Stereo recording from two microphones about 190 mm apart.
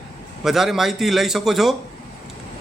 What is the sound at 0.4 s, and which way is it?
A man's voice, centre (ahead or behind).